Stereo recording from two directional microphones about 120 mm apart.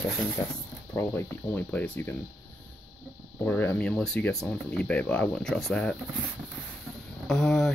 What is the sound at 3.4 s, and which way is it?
Speech, 15° left (ahead or behind).